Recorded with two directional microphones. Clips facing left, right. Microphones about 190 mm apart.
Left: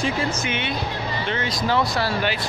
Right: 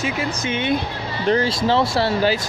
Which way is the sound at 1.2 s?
35° right (ahead or behind).